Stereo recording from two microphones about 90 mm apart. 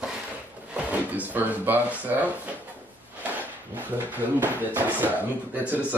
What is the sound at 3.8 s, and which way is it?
Speech, 20° right (ahead or behind).